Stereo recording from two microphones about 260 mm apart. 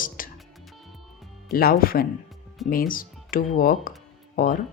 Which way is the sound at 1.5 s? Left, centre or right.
Left.